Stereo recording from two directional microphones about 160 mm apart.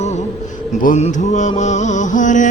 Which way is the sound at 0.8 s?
50° left (ahead or behind).